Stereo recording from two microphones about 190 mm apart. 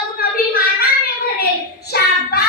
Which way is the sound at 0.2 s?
50° left (ahead or behind).